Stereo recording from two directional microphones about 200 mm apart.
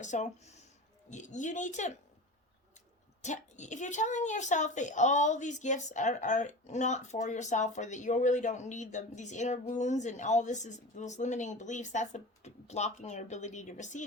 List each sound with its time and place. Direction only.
0.0 s speech: 35° left (ahead or behind)
3.2 s speech: 35° left (ahead or behind)